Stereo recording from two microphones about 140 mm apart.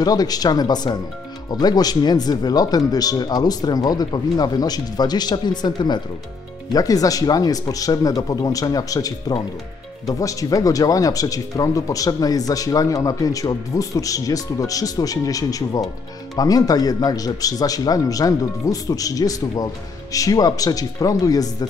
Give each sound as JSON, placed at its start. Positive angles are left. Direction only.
{"t": 0.0, "sound": "speech", "side_deg": 25}